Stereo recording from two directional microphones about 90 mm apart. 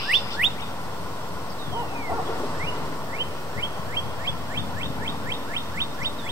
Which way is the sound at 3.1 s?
35° right (ahead or behind).